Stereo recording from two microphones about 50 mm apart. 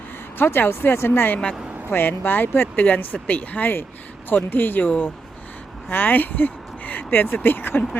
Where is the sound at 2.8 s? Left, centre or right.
Left.